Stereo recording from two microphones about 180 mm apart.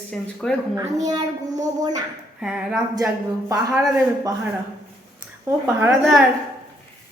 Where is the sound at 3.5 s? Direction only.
20° right (ahead or behind).